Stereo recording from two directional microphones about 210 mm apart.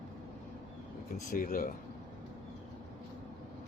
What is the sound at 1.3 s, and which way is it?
Speech, 40° left (ahead or behind).